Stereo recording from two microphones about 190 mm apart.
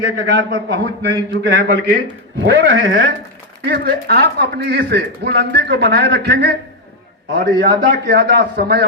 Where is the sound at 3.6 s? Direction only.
55° right (ahead or behind).